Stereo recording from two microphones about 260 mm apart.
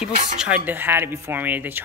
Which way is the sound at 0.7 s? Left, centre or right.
Centre.